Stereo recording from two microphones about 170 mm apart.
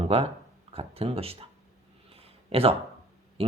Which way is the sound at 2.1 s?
35° right (ahead or behind).